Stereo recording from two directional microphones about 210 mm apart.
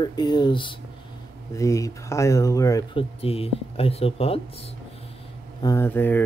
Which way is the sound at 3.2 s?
30° left (ahead or behind).